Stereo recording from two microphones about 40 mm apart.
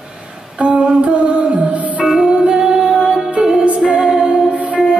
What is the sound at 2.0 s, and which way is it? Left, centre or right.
Music, centre.